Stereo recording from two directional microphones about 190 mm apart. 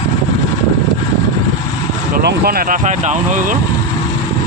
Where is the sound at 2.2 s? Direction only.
50° right (ahead or behind).